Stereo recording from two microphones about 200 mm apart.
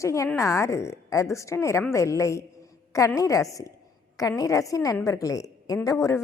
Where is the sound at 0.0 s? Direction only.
15° left (ahead or behind).